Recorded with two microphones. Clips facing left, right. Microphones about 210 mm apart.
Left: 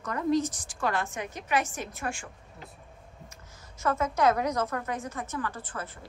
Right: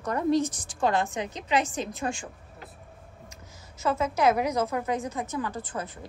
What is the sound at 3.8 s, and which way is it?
A woman's voice, 10° right (ahead or behind).